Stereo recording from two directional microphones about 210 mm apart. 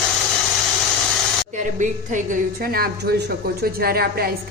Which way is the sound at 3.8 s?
45° right (ahead or behind).